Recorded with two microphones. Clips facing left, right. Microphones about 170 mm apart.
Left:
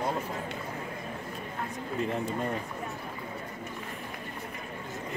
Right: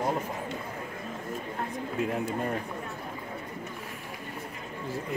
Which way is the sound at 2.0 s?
5° right (ahead or behind).